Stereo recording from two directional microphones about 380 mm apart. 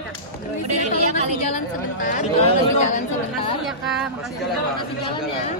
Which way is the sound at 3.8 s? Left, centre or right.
Centre.